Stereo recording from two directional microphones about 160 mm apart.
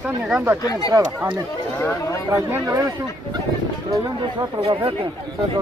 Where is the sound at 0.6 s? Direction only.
20° left (ahead or behind).